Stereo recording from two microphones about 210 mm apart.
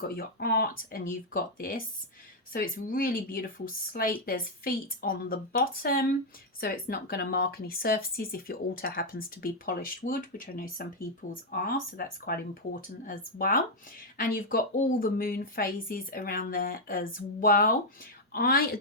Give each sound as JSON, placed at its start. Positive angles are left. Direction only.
{"t": 0.2, "sound": "speech", "side_deg": 50}